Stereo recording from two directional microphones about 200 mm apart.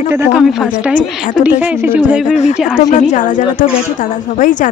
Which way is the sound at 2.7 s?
35° left (ahead or behind).